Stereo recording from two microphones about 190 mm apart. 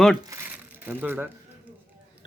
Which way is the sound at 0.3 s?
10° right (ahead or behind).